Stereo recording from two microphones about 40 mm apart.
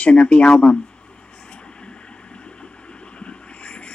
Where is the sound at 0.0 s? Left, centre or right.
Left.